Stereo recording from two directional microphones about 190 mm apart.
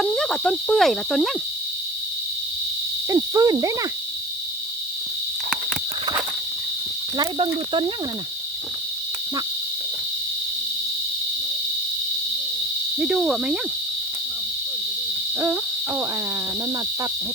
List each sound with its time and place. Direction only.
0.0 s cricket: 5° left (ahead or behind)
3.1 s hoot: 20° right (ahead or behind)
7.2 s hoot: 25° right (ahead or behind)
13.0 s cricket: 5° right (ahead or behind)